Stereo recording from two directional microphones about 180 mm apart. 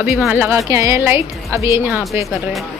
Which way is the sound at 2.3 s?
Centre (ahead or behind).